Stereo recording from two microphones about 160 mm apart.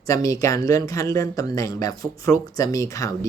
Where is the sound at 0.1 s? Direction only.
20° left (ahead or behind).